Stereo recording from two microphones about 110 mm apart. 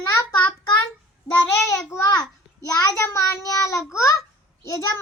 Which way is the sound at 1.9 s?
35° left (ahead or behind).